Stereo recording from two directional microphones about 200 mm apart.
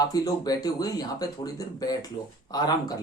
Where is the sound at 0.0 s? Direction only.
20° left (ahead or behind).